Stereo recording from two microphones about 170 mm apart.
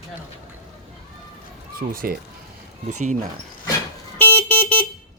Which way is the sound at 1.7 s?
60° right (ahead or behind).